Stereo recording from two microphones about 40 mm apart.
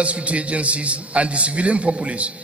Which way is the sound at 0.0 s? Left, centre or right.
Right.